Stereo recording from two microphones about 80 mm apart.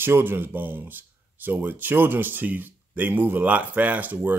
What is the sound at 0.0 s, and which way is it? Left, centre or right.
Speech, right.